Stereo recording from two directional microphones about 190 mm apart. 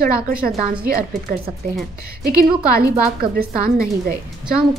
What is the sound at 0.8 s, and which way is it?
A woman's voice, 50° right (ahead or behind).